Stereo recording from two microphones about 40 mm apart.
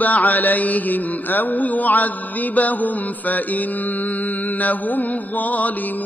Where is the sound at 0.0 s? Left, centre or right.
Left.